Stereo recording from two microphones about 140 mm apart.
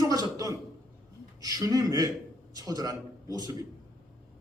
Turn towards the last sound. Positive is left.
turn(degrees=-25)  # may be behind; listen again after turning